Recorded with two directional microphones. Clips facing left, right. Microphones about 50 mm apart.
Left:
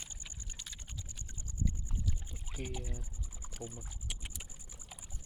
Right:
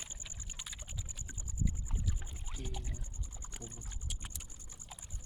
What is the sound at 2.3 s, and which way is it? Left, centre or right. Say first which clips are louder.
Music: even; centre.